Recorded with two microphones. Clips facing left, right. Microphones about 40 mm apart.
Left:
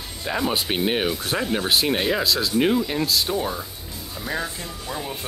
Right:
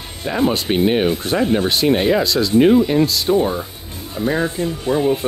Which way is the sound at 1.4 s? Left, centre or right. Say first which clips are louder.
Right 9 dB; centre.